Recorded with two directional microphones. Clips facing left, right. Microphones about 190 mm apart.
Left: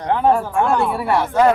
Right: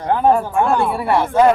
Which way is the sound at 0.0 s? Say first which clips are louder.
Right 1 dB; 10° right (ahead or behind).